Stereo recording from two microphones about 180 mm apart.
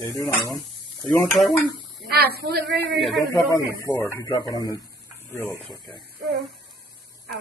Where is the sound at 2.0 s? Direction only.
60° right (ahead or behind).